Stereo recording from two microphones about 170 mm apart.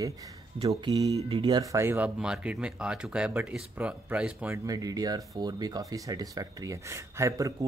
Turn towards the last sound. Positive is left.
turn(degrees=-20)  # may be behind; listen again after turning